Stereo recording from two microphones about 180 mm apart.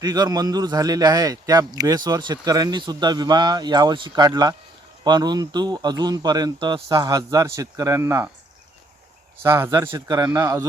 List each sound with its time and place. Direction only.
0.0 s a man's voice: 20° right (ahead or behind)
9.4 s a man's voice: 15° right (ahead or behind)